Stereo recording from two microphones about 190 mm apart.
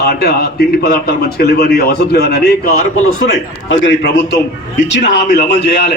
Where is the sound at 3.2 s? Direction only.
65° left (ahead or behind).